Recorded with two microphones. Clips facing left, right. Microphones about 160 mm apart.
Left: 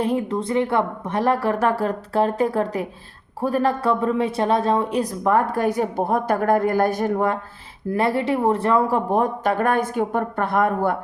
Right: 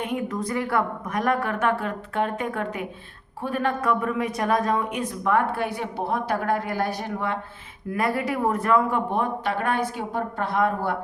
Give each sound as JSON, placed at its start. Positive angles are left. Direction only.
{"t": 0.0, "sound": "speech", "side_deg": 30}
{"t": 7.9, "sound": "speech", "side_deg": 30}